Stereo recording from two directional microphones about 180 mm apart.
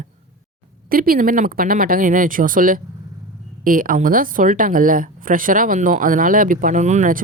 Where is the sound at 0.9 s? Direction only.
55° right (ahead or behind).